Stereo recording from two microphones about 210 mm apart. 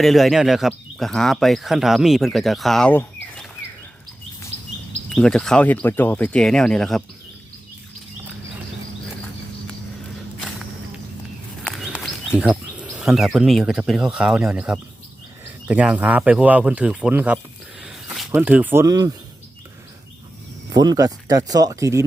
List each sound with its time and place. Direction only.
0.0 s speech: centre (ahead or behind)
5.0 s speech: 5° left (ahead or behind)
11.6 s bird: centre (ahead or behind)
13.0 s speech: centre (ahead or behind); by 19.1 s 15° right (ahead or behind)
20.7 s speech: 20° right (ahead or behind)